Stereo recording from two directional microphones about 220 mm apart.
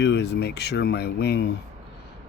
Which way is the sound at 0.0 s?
50° left (ahead or behind).